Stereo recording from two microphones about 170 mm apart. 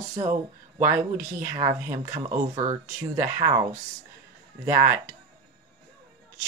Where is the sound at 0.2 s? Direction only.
50° right (ahead or behind).